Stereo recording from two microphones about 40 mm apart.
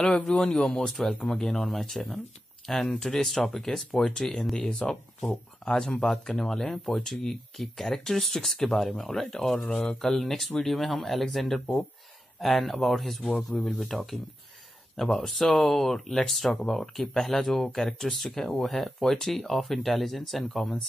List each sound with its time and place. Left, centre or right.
0.1 s speech: centre